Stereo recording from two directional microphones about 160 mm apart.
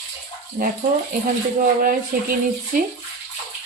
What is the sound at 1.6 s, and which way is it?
Speech, 60° right (ahead or behind).